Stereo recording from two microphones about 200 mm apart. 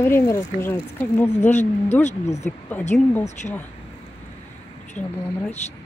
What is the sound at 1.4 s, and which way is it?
Speech, 35° left (ahead or behind).